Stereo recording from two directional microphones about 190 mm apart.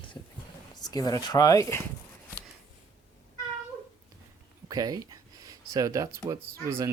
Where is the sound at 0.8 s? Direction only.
20° left (ahead or behind).